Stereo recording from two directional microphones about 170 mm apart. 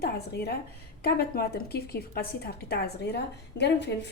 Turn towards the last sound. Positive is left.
turn(degrees=90)